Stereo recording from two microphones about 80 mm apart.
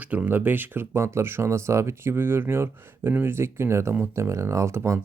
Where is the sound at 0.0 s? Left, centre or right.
Centre.